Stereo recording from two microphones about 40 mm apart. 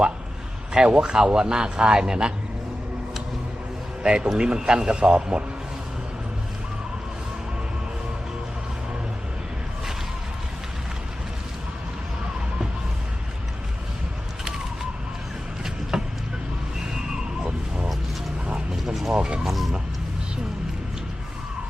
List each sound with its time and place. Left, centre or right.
0.7 s speech: right
4.0 s speech: right
15.9 s vehicle: centre
19.1 s chicken: right
19.4 s chicken: centre